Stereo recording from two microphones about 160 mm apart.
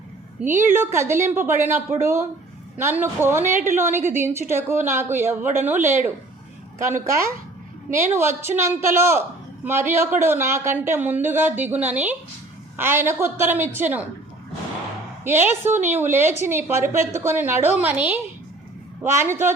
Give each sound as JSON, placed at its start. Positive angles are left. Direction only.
{"t": 0.7, "sound": "speech", "side_deg": -15}
{"t": 15.2, "sound": "speech", "side_deg": -15}